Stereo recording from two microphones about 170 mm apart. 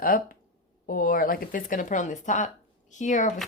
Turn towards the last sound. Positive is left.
turn(degrees=45)  # may be behind; listen again after turning